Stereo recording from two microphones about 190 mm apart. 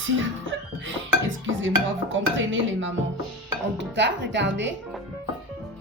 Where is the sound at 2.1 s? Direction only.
85° right.